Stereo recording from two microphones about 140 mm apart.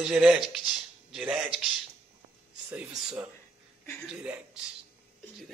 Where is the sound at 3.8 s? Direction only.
15° left (ahead or behind).